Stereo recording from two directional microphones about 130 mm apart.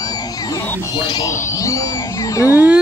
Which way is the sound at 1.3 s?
20° left (ahead or behind).